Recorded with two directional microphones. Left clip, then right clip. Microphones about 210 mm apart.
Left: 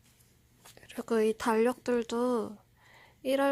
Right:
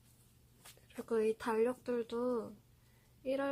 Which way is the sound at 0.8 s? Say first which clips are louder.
Left 6 dB; 45° left (ahead or behind).